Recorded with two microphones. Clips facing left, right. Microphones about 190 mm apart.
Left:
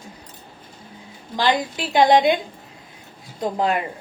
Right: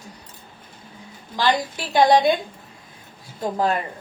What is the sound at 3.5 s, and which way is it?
Speech, 20° left (ahead or behind).